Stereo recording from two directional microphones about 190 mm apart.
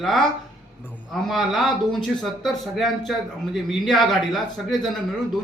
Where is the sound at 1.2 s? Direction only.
Centre (ahead or behind).